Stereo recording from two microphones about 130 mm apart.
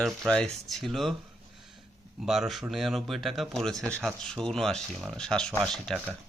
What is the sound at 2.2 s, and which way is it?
Speech, centre (ahead or behind).